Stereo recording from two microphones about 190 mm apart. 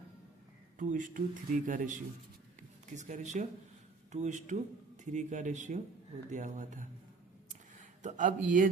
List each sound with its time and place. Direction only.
0.8 s speech: 45° right (ahead or behind)
8.0 s speech: 40° right (ahead or behind)